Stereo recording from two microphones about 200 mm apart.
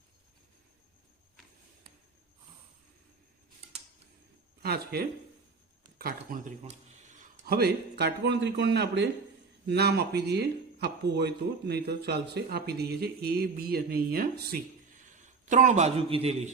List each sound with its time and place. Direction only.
4.6 s speech: 50° right (ahead or behind)
15.1 s a man's voice: 40° right (ahead or behind)